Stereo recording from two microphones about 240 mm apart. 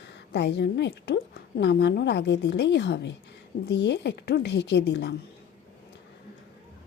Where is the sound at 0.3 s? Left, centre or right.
Left.